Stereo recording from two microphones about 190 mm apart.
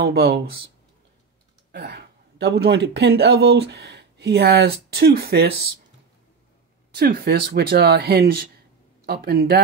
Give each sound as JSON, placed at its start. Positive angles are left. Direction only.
{"t": 0.0, "sound": "speech", "side_deg": -55}
{"t": 1.7, "sound": "speech", "side_deg": -55}
{"t": 6.9, "sound": "speech", "side_deg": -55}